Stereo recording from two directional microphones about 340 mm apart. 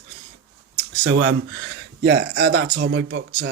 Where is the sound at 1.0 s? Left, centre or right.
Right.